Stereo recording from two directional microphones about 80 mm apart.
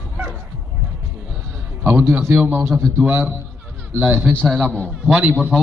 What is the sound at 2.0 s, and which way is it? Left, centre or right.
A man's voice, right.